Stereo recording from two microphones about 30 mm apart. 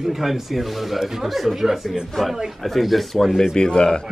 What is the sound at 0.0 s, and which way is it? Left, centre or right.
Speech, centre.